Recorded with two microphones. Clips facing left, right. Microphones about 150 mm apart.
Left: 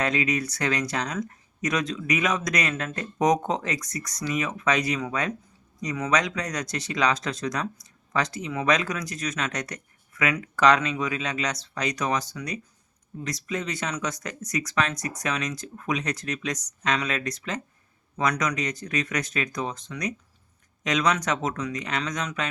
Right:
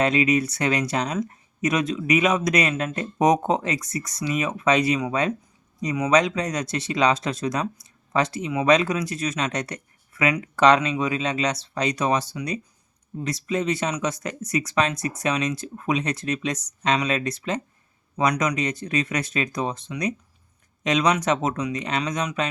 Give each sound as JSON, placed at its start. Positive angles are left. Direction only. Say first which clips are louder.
{"t": 0.0, "sound": "speech", "louder": "right 5 dB", "side_deg": -25}